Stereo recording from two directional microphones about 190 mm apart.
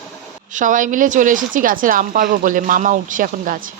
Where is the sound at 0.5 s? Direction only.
45° right (ahead or behind).